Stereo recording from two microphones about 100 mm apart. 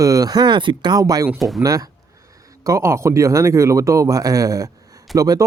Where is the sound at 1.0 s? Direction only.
35° right (ahead or behind).